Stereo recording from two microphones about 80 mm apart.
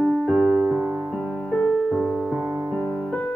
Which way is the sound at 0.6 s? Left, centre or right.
Centre.